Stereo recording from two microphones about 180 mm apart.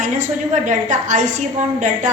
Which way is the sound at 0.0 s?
45° right (ahead or behind).